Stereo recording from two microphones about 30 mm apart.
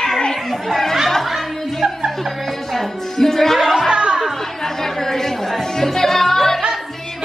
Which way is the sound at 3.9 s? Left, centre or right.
Right.